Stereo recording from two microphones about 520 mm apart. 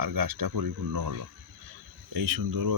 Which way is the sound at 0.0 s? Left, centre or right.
Right.